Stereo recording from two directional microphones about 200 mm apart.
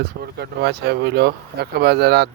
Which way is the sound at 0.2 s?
55° right (ahead or behind).